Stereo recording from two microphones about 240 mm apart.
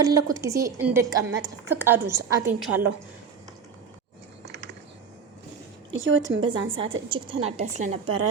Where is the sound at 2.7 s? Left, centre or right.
Right.